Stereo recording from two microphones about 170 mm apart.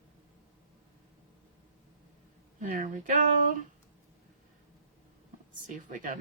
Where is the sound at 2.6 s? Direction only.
50° right (ahead or behind).